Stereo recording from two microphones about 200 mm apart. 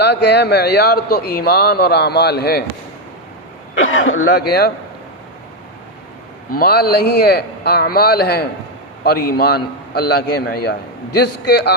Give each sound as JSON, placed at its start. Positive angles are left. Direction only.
{"t": 0.0, "sound": "a man's voice", "side_deg": 55}
{"t": 3.8, "sound": "speech", "side_deg": 85}
{"t": 4.3, "sound": "a man's voice", "side_deg": 50}
{"t": 6.5, "sound": "a man's voice", "side_deg": 50}